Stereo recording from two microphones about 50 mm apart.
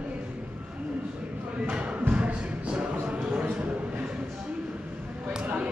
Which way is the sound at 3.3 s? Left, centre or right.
Right.